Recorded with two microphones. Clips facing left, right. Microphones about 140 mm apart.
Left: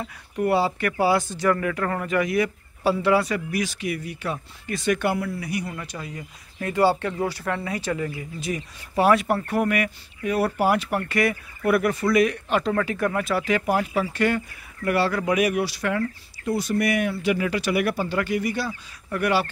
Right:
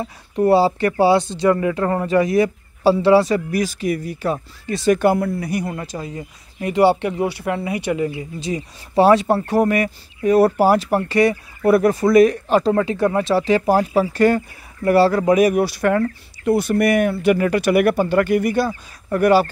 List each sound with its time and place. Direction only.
0.0 s speech: 35° right (ahead or behind)
5.9 s speech: 25° right (ahead or behind); by 16.0 s 50° right (ahead or behind)
16.4 s speech: 65° right (ahead or behind); by 19.5 s 40° right (ahead or behind)